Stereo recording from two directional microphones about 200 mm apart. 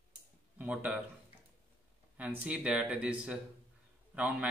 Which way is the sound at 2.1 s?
10° right (ahead or behind).